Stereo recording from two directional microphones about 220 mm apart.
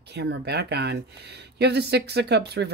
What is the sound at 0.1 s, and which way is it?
Speech, 50° right (ahead or behind).